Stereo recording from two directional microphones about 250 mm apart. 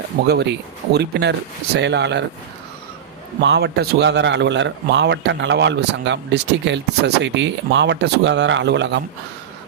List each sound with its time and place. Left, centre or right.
0.3 s a man's voice: right
3.4 s a man's voice: right